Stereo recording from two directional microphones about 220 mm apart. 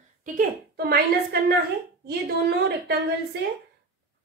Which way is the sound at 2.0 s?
50° right (ahead or behind).